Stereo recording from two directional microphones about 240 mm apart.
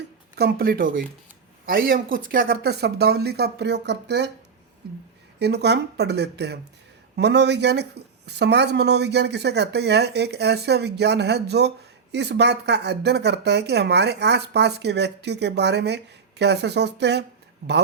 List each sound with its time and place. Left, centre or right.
0.3 s speech: right
5.4 s speech: right